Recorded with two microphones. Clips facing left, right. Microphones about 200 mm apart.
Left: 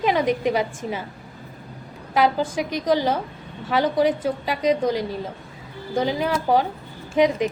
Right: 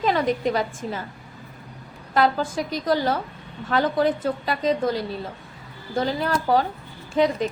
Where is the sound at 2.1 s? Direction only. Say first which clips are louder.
Left 1 dB; 15° left (ahead or behind).